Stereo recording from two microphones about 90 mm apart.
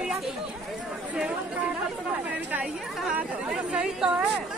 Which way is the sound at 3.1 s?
15° right (ahead or behind).